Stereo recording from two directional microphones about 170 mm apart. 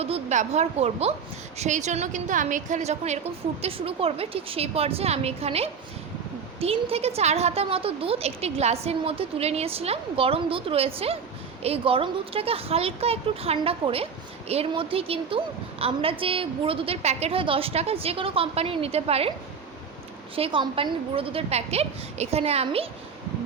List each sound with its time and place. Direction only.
0.0 s a woman's voice: 40° right (ahead or behind)
20.3 s speech: 30° right (ahead or behind)